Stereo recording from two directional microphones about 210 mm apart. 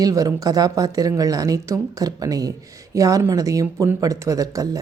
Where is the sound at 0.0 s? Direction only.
15° right (ahead or behind).